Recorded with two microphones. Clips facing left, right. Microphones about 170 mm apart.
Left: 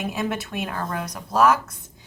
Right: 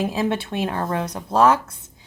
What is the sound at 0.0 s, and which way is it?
Speech, 30° right (ahead or behind).